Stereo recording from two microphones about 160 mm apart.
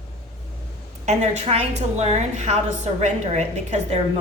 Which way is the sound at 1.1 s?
40° right (ahead or behind).